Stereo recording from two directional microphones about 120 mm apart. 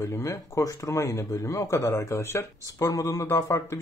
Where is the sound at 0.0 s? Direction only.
25° left (ahead or behind).